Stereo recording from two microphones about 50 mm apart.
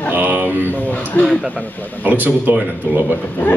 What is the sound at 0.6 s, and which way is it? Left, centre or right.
Speech, left.